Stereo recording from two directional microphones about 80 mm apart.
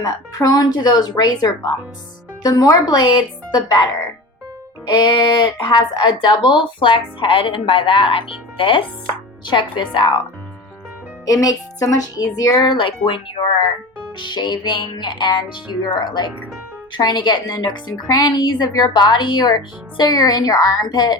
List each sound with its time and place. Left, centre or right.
0.0 s speech: left
4.9 s speech: left
11.3 s speech: left
12.5 s speech: left
14.2 s speech: left